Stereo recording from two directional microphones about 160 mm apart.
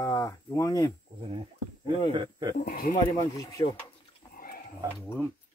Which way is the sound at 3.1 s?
20° left (ahead or behind).